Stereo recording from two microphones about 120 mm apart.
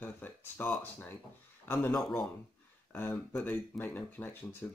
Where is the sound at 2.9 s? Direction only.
15° left (ahead or behind).